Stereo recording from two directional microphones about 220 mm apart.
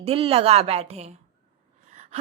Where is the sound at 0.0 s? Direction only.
25° right (ahead or behind).